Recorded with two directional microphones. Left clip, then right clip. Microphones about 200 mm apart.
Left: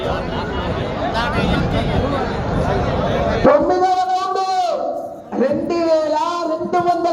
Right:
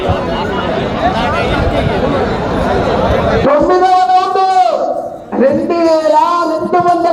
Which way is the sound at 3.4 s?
20° left (ahead or behind).